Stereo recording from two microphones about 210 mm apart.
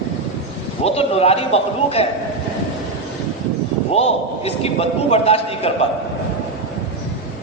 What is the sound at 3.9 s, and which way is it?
A man's voice, 30° left (ahead or behind).